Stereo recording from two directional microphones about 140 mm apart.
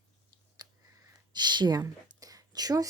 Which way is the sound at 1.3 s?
30° right (ahead or behind).